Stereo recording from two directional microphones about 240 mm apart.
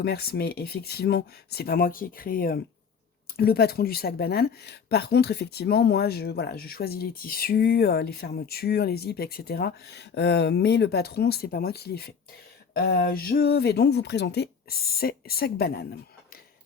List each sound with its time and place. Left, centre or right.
0.0 s speech: left